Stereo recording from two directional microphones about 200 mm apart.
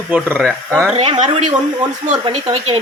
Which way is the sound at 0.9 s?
30° right (ahead or behind).